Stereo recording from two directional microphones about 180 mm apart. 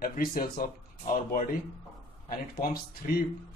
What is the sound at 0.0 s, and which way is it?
Speech, 55° left (ahead or behind).